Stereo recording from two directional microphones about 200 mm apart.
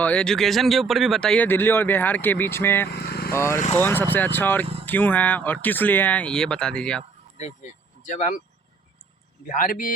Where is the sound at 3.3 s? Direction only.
10° left (ahead or behind).